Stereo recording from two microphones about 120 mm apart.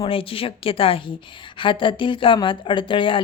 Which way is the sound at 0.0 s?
50° left (ahead or behind).